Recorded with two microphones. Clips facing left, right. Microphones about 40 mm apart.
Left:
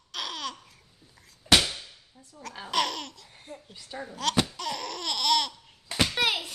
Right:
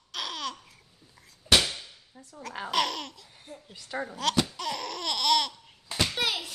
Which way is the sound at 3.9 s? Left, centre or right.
Right.